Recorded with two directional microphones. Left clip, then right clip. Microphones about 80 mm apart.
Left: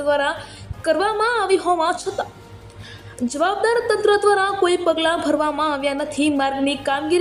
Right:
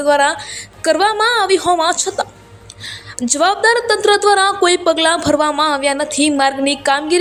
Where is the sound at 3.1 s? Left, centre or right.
Right.